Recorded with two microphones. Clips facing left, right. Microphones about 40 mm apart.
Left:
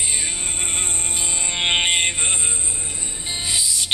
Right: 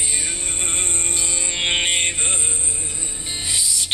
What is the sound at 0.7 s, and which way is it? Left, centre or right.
Music, left.